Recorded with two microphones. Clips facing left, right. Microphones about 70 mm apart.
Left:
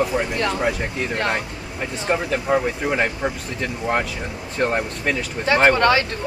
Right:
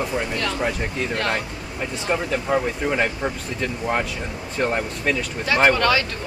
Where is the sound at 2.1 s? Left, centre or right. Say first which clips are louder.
Left 1 dB; centre.